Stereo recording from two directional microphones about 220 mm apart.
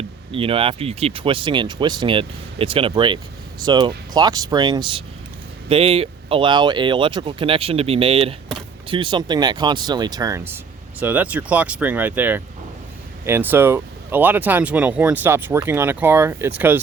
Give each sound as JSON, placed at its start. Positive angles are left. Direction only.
{"t": 0.3, "sound": "speech", "side_deg": -25}